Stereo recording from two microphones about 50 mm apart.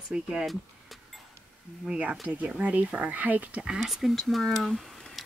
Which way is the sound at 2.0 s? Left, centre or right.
Right.